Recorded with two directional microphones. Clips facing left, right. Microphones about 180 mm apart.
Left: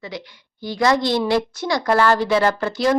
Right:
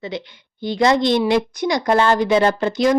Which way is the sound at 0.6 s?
25° right (ahead or behind).